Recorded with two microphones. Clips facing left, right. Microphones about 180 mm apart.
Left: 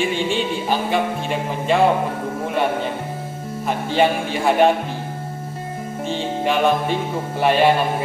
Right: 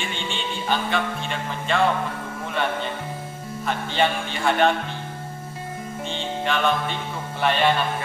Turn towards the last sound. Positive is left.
turn(degrees=10)  # may be behind; listen again after turning